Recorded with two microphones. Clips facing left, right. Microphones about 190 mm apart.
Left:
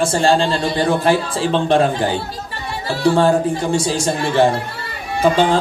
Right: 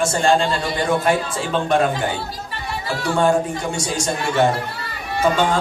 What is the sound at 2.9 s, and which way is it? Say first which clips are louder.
A man's voice: left 4 dB; 30° left (ahead or behind).